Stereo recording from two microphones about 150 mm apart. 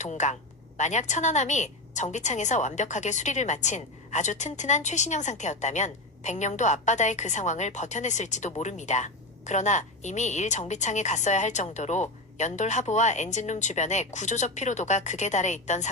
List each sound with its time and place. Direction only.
0.0 s a woman's voice: 50° left (ahead or behind)